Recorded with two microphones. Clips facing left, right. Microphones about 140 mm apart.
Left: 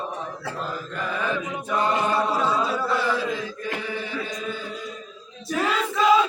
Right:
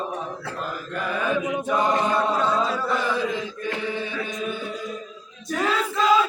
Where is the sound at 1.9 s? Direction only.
10° left (ahead or behind).